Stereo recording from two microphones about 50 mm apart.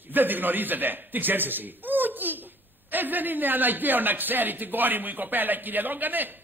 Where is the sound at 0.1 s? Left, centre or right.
Right.